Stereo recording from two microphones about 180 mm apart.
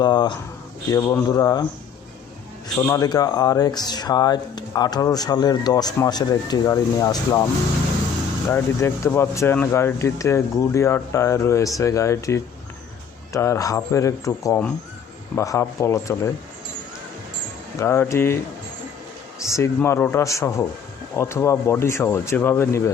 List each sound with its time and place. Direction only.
0.0 s speech: 25° left (ahead or behind)
2.7 s speech: 15° left (ahead or behind)
8.4 s speech: 15° left (ahead or behind)
17.7 s speech: 15° left (ahead or behind)
19.5 s speech: 15° left (ahead or behind)